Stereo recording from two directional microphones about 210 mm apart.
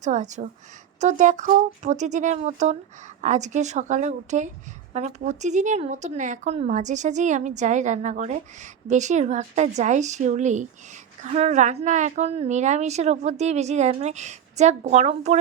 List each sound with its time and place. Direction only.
0.0 s a woman's voice: 35° right (ahead or behind)